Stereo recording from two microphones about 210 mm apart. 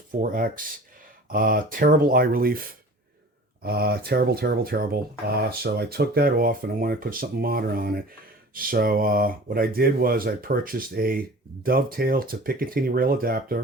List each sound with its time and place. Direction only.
0.2 s speech: 40° right (ahead or behind)